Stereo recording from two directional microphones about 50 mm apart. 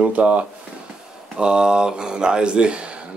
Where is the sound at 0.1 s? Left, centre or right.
Right.